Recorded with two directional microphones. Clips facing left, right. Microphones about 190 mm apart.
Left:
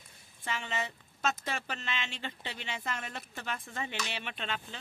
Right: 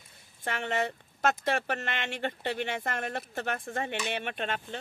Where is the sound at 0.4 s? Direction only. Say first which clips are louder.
Right 6 dB; 60° right (ahead or behind).